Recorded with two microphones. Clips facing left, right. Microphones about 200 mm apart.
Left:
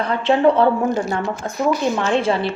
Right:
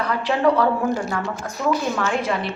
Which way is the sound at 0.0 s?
25° left (ahead or behind).